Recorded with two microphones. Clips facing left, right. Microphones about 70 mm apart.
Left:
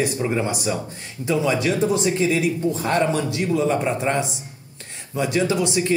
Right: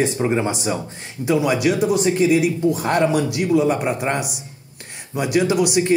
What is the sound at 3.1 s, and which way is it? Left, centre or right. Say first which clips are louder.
Speech: right 3 dB; left.